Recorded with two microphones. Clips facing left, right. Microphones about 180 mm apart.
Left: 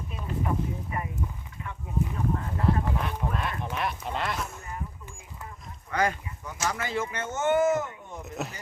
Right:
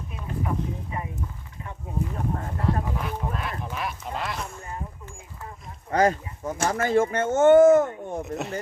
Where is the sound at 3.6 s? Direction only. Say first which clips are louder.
Left 1 dB; centre (ahead or behind).